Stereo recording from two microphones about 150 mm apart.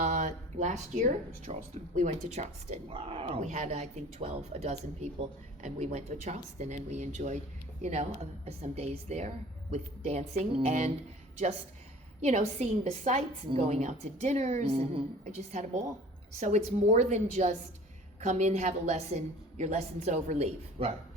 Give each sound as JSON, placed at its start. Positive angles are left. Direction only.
{"t": 0.0, "sound": "speech", "side_deg": -50}
{"t": 12.2, "sound": "speech", "side_deg": -50}